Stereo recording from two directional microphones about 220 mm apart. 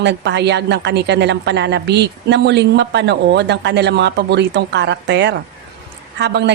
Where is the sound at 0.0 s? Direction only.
50° right (ahead or behind).